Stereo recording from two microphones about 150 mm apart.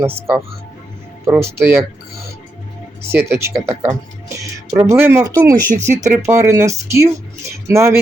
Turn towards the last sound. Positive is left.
turn(degrees=-20)  # may be behind; listen again after turning